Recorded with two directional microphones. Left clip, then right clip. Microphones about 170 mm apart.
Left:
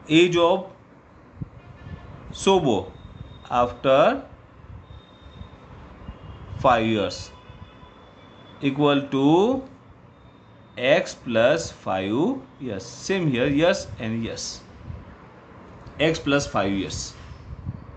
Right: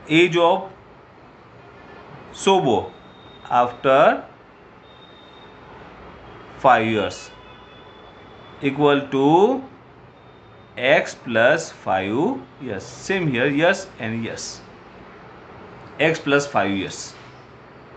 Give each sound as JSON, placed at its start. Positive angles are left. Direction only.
{"t": 0.0, "sound": "speech", "side_deg": 65}
{"t": 2.3, "sound": "speech", "side_deg": 65}
{"t": 6.6, "sound": "speech", "side_deg": 60}
{"t": 8.5, "sound": "speech", "side_deg": 60}
{"t": 10.8, "sound": "speech", "side_deg": 60}
{"t": 16.0, "sound": "speech", "side_deg": 65}